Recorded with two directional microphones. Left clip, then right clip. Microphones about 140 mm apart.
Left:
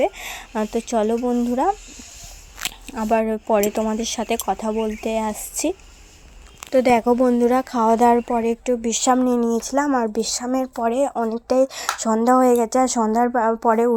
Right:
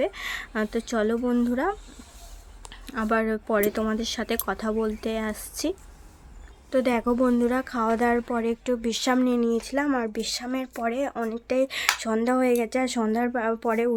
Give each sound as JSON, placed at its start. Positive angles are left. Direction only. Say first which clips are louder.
{"t": 0.0, "sound": "speech", "louder": "left 5 dB", "side_deg": 20}
{"t": 1.1, "sound": "a woman's voice", "louder": "left 4 dB", "side_deg": 0}
{"t": 2.8, "sound": "speech", "louder": "left 4 dB", "side_deg": 15}
{"t": 6.7, "sound": "speech", "louder": "left 8 dB", "side_deg": 30}
{"t": 8.4, "sound": "speech", "louder": "left 5 dB", "side_deg": 20}
{"t": 13.0, "sound": "a woman's voice", "louder": "left 7 dB", "side_deg": 0}